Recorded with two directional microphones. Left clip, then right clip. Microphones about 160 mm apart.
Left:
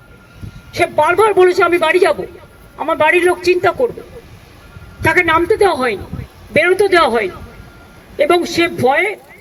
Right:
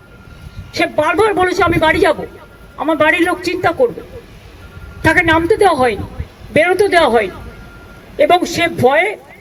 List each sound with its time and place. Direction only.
0.7 s a man's voice: 30° left (ahead or behind)
5.2 s a man's voice: 30° left (ahead or behind)